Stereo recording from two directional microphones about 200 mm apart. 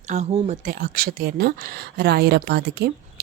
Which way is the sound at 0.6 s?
45° right (ahead or behind).